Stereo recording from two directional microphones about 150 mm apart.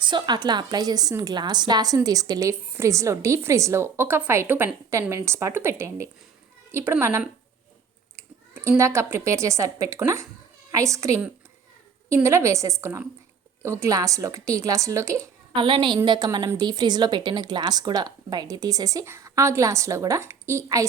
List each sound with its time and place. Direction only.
0.0 s a woman's voice: 30° right (ahead or behind); by 7.3 s 15° right (ahead or behind)
8.1 s a sound: 15° right (ahead or behind)
8.8 s speech: 15° right (ahead or behind)
15.5 s a woman's voice: 35° right (ahead or behind)